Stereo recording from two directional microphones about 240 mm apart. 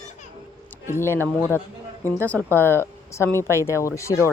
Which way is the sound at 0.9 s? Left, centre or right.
Centre.